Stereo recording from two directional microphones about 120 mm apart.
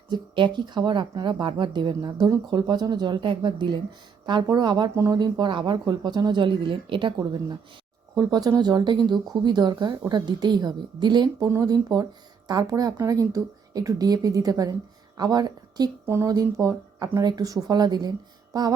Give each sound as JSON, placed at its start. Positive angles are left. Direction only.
{"t": 0.1, "sound": "speech", "side_deg": -40}
{"t": 8.1, "sound": "a woman's voice", "side_deg": -35}